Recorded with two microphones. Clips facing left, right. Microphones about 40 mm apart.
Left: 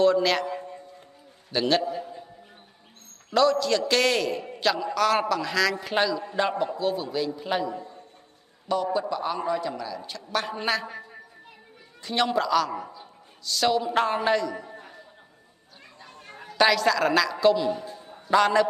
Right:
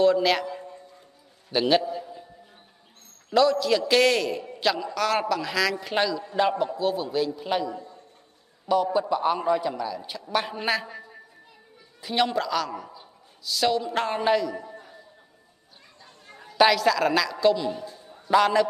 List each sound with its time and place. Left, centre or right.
0.0 s a woman's voice: centre
0.5 s a sound: centre
1.5 s a man's voice: centre
1.8 s a sound: centre
3.3 s a woman's voice: centre
7.6 s a man's voice: centre
8.7 s a woman's voice: centre
9.1 s a man's voice: centre
12.0 s a woman's voice: centre
16.5 s a woman's voice: centre
17.8 s a sound: left
18.2 s a man's voice: centre